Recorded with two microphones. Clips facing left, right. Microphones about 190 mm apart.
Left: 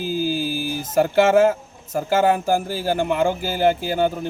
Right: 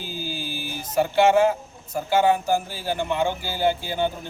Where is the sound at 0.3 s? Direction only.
45° left (ahead or behind).